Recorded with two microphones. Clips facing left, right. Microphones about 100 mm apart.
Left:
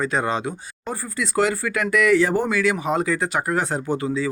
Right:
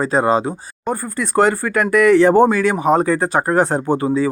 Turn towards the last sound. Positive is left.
turn(degrees=-45)  # may be behind; listen again after turning